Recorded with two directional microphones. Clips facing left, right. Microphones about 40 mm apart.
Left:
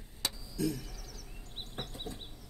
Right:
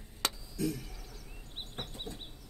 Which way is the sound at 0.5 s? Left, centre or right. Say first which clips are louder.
Left 1 dB; right.